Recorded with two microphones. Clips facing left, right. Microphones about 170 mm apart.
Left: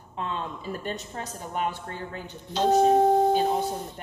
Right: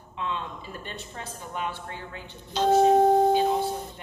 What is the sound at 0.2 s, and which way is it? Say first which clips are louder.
Speech: left 1 dB; 40° left (ahead or behind).